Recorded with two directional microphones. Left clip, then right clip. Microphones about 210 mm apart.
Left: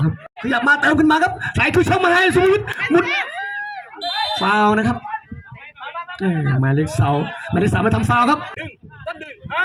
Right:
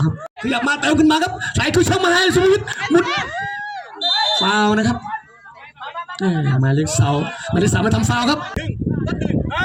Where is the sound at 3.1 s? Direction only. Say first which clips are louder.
Even; 30° right (ahead or behind).